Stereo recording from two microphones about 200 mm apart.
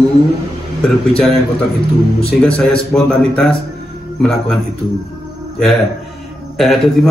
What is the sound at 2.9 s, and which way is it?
A man's voice, 5° left (ahead or behind).